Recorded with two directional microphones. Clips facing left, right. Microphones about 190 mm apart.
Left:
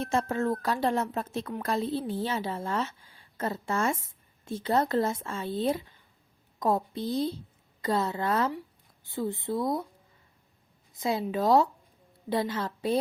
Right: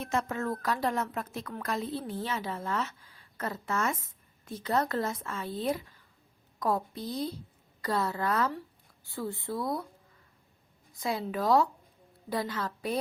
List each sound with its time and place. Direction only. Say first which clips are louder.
0.0 s a woman's voice: left 4 dB; 30° left (ahead or behind)
10.9 s a woman's voice: left 3 dB; 25° left (ahead or behind)